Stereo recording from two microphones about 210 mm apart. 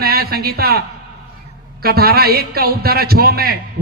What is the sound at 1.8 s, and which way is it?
A man's voice, 45° right (ahead or behind).